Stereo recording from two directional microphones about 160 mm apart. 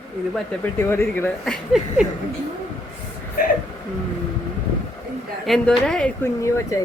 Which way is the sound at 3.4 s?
65° left (ahead or behind).